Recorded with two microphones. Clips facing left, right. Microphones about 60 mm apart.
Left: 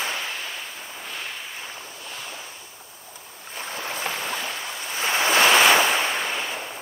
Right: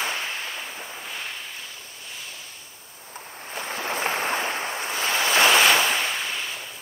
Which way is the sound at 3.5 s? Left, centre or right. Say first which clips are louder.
Right 3 dB; right.